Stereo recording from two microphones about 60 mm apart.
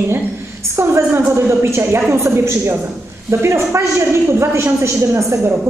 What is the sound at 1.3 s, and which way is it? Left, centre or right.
A woman's voice, right.